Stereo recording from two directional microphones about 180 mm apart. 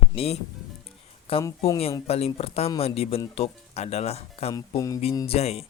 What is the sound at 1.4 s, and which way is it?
Speech, 15° left (ahead or behind).